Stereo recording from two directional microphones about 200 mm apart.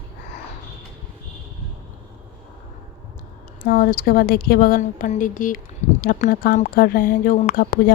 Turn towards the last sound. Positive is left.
turn(degrees=50)  # may be behind; listen again after turning